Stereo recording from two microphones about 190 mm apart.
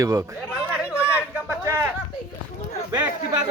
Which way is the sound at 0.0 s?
20° right (ahead or behind).